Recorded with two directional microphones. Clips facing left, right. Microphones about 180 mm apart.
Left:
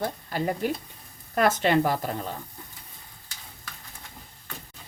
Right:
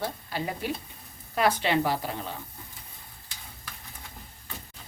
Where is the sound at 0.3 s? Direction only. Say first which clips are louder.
Left 7 dB; 45° left (ahead or behind).